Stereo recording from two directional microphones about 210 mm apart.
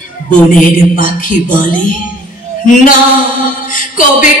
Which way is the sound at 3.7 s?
40° left (ahead or behind).